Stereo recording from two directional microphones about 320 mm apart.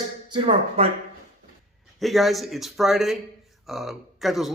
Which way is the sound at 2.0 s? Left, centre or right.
Centre.